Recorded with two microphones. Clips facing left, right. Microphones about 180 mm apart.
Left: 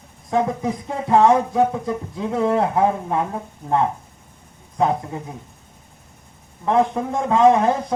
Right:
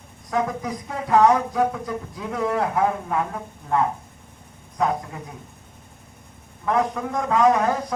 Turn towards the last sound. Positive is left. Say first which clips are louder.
# left 4 dB
turn(degrees=25)  # may be behind; listen again after turning